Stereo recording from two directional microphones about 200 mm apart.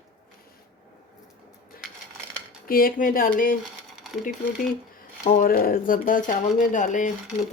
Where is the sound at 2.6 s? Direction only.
45° left (ahead or behind).